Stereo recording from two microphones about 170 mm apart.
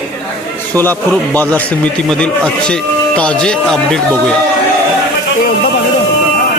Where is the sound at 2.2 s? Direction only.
5° left (ahead or behind).